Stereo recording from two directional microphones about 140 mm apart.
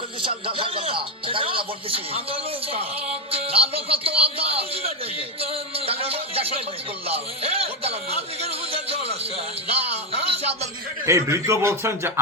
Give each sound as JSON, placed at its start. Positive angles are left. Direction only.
{"t": 0.3, "sound": "speech", "side_deg": -40}
{"t": 11.0, "sound": "a man's voice", "side_deg": -20}